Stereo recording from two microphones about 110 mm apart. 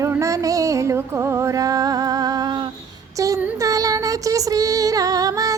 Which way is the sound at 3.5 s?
30° right (ahead or behind).